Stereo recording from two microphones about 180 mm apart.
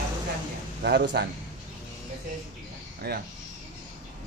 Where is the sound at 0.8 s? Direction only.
65° right (ahead or behind).